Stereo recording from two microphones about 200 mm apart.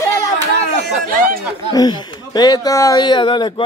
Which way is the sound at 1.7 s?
20° left (ahead or behind).